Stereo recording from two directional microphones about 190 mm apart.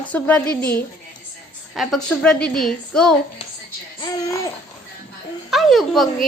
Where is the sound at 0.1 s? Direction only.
5° left (ahead or behind).